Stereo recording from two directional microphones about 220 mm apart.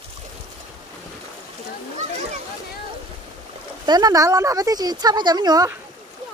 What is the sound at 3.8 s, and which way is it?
Speech, 20° right (ahead or behind).